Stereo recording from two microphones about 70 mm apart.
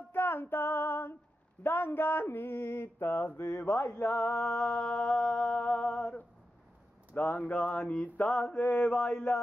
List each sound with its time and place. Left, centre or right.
0.1 s female singing: left
1.6 s mantra: left
4.1 s speech: left
4.7 s humming: centre
7.2 s speech: left
7.9 s mantra: centre
8.6 s speech: left